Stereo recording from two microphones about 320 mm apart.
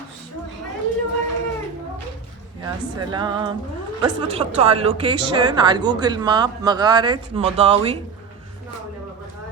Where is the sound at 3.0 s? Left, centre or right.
Centre.